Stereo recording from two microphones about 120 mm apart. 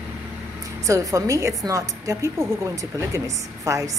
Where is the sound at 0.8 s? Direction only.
25° right (ahead or behind).